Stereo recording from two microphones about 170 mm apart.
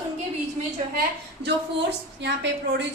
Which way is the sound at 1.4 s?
90° right.